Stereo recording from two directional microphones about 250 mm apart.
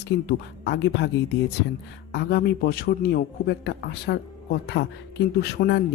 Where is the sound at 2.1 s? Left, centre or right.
Left.